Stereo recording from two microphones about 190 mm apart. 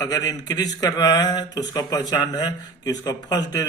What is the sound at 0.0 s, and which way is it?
Speech, 20° left (ahead or behind).